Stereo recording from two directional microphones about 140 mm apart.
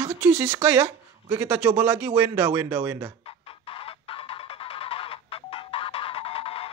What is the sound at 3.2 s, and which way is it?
Music, 40° left (ahead or behind).